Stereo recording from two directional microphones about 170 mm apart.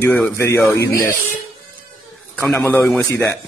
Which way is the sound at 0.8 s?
55° left (ahead or behind).